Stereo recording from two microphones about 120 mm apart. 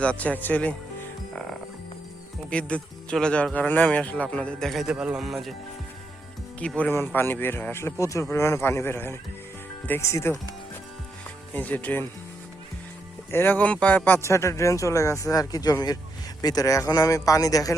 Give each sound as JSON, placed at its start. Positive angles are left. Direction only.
{"t": 0.0, "sound": "speech", "side_deg": 10}
{"t": 2.5, "sound": "speech", "side_deg": 10}
{"t": 6.6, "sound": "speech", "side_deg": 10}
{"t": 6.9, "sound": "a man's voice", "side_deg": 20}
{"t": 11.5, "sound": "speech", "side_deg": 15}
{"t": 13.3, "sound": "a man's voice", "side_deg": 15}